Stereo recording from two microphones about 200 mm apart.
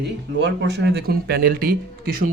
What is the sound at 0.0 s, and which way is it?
Speech, 60° right (ahead or behind).